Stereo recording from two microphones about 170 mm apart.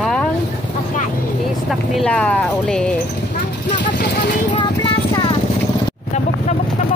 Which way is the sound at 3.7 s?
50° left (ahead or behind).